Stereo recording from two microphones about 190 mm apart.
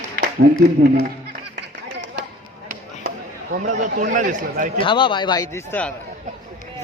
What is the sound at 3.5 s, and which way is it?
A man's voice, 40° right (ahead or behind).